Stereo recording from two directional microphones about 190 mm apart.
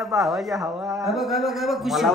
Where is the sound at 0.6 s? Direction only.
20° right (ahead or behind).